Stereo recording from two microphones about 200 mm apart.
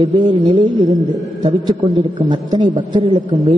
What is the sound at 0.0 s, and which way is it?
Speech, 25° right (ahead or behind).